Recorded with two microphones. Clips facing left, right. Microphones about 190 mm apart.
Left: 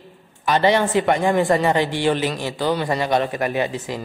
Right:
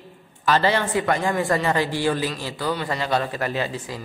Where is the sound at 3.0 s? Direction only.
20° left (ahead or behind).